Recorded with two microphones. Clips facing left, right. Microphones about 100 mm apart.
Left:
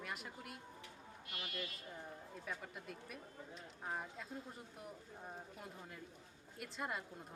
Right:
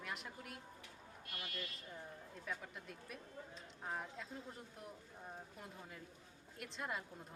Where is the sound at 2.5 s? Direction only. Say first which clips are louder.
Even; centre (ahead or behind).